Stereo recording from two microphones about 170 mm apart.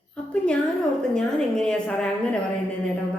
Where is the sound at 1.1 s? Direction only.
5° left (ahead or behind).